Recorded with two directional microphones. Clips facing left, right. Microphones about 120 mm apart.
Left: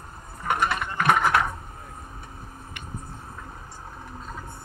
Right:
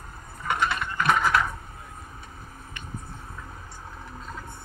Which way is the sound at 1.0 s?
20° left (ahead or behind).